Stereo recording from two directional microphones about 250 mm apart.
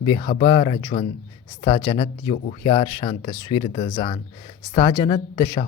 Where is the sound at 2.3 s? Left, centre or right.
Left.